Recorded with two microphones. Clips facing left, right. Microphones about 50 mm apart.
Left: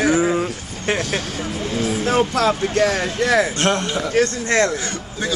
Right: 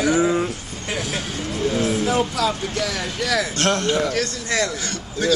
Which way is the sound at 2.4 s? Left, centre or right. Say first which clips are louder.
Left 5 dB; left.